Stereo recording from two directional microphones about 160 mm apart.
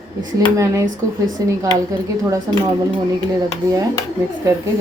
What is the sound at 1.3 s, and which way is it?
Speech, 20° right (ahead or behind).